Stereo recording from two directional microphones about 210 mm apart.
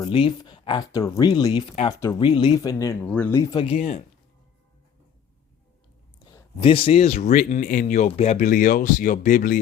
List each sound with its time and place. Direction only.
0.0 s speech: 25° left (ahead or behind)
3.5 s speech: 25° left (ahead or behind)
6.3 s speech: 25° left (ahead or behind)